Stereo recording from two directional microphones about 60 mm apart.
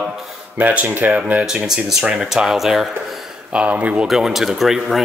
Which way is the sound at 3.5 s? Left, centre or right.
Right.